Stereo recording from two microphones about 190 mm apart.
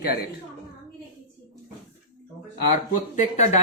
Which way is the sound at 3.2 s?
35° left (ahead or behind).